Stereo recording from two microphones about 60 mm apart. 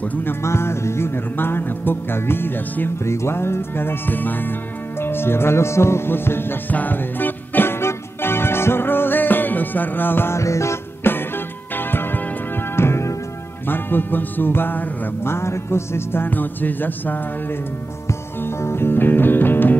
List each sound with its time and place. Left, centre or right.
0.0 s music: left
0.4 s music: left
3.0 s music: left
10.4 s music: left
11.1 s music: left
13.7 s music: left
18.4 s music: left